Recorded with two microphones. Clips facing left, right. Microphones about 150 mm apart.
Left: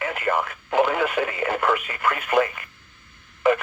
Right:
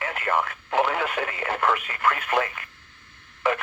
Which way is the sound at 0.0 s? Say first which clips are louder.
Left 2 dB; 15° left (ahead or behind).